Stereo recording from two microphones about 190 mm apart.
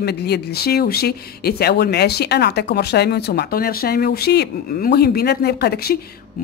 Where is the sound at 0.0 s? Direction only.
60° left (ahead or behind).